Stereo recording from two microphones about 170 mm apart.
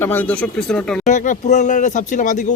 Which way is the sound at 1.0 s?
45° left (ahead or behind).